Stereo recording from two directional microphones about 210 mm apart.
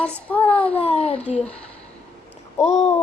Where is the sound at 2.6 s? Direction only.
35° left (ahead or behind).